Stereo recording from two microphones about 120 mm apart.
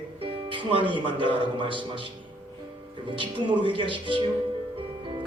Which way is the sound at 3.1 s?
45° right (ahead or behind).